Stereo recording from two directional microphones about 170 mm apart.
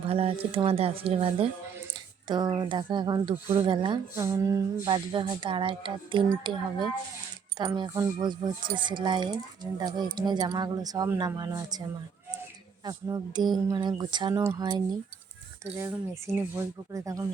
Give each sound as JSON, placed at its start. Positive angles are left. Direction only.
{"t": 0.1, "sound": "speech", "side_deg": -35}
{"t": 4.1, "sound": "speech", "side_deg": -15}
{"t": 12.8, "sound": "speech", "side_deg": -20}
{"t": 15.8, "sound": "speech", "side_deg": -15}